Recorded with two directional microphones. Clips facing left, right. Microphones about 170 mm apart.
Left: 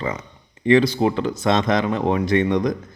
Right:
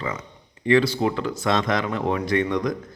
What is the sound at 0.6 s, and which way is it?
Speech, 20° left (ahead or behind).